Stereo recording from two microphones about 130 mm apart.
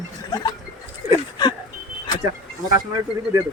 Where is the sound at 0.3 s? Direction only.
30° left (ahead or behind).